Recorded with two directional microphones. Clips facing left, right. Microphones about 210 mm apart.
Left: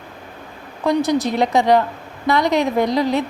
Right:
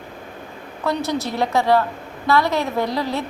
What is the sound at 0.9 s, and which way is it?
A woman's voice, 15° left (ahead or behind).